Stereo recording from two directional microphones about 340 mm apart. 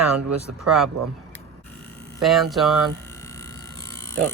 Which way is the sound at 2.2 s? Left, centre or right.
Centre.